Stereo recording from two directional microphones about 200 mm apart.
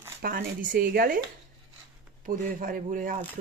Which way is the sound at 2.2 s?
45° right (ahead or behind).